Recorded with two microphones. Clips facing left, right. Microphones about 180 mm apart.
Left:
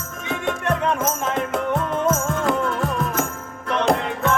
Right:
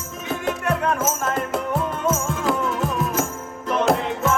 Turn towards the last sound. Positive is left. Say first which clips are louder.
# even
turn(degrees=-5)  # may be behind; listen again after turning